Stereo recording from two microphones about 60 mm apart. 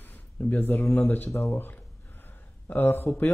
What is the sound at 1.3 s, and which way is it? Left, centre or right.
Speech, left.